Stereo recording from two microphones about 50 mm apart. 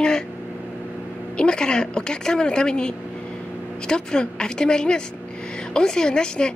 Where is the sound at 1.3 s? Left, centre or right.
Centre.